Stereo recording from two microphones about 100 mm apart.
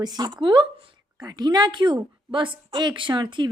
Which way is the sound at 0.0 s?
40° right (ahead or behind).